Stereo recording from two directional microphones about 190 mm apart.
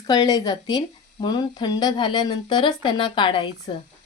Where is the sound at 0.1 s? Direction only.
20° left (ahead or behind).